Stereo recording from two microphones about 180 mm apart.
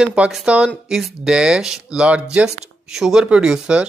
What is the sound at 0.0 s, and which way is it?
Speech, 5° right (ahead or behind).